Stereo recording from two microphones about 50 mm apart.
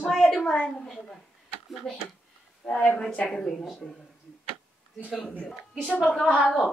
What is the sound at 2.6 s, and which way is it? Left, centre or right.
Speech, centre.